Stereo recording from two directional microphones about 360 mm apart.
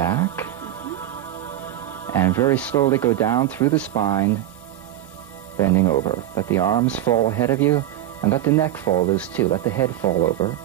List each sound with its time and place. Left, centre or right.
0.0 s music: centre
2.0 s speech: centre
5.6 s speech: centre